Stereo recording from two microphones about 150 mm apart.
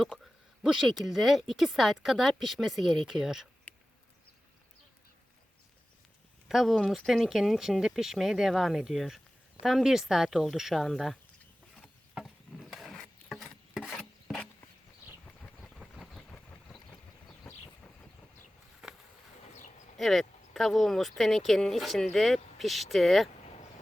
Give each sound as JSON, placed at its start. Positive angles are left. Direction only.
{"t": 0.6, "sound": "speech", "side_deg": 0}
{"t": 3.7, "sound": "a sound", "side_deg": 10}
{"t": 6.5, "sound": "speech", "side_deg": 0}
{"t": 11.8, "sound": "a sound", "side_deg": 0}
{"t": 16.9, "sound": "vehicle", "side_deg": 20}
{"t": 20.0, "sound": "speech", "side_deg": 0}